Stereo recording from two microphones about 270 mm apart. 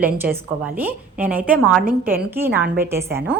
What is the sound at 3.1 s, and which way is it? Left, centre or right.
Speech, right.